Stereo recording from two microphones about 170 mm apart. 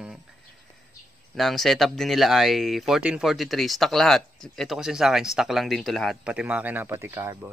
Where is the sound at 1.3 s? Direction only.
Centre (ahead or behind).